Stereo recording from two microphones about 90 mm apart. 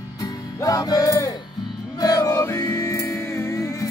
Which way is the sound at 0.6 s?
40° left (ahead or behind).